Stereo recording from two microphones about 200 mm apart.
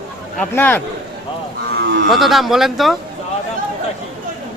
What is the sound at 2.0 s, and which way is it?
Speech, centre (ahead or behind).